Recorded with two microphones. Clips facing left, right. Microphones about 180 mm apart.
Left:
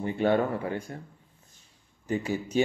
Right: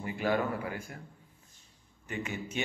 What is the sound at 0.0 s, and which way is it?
Speech, 30° left (ahead or behind).